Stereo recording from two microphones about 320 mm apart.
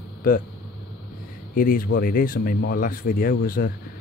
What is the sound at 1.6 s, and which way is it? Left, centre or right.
Speech, left.